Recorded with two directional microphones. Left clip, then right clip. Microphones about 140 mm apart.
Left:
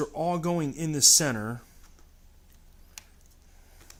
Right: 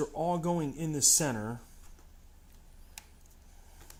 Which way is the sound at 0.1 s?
30° left (ahead or behind).